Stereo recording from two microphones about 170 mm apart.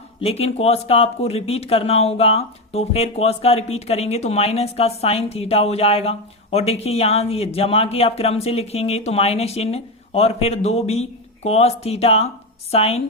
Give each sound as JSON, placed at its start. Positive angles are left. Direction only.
{"t": 0.2, "sound": "speech", "side_deg": 35}